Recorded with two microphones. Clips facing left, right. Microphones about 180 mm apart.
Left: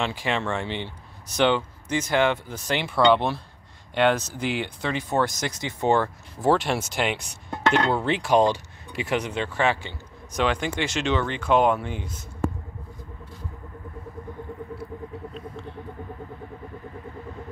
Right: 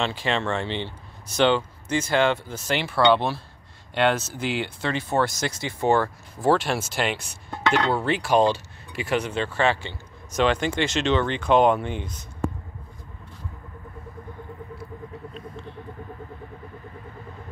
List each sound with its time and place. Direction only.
0.0 s speech: 15° left (ahead or behind)